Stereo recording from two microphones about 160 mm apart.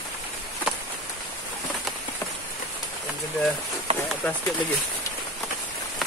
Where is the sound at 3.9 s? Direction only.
40° right (ahead or behind).